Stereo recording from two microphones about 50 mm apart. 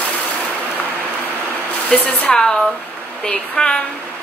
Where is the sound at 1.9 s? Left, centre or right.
Centre.